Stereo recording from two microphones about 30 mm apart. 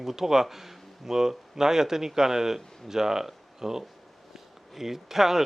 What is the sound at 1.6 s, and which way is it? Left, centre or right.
A man's voice, centre.